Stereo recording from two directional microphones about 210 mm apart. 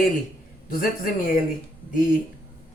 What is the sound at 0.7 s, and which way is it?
Speech, 40° left (ahead or behind).